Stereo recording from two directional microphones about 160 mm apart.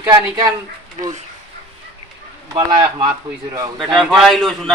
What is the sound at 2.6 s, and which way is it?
Speech, 25° right (ahead or behind).